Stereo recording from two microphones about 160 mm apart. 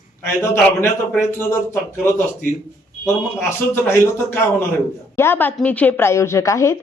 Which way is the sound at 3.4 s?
15° left (ahead or behind).